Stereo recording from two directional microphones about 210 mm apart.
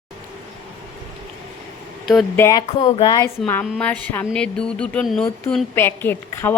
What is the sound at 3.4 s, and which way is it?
A woman's voice, 10° left (ahead or behind).